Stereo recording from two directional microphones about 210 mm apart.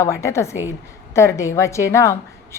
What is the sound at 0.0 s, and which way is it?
A woman's voice, 15° left (ahead or behind).